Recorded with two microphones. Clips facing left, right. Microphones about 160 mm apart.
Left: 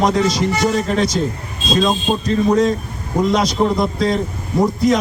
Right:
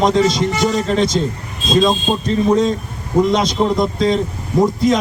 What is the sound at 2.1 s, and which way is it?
A man's voice, centre (ahead or behind).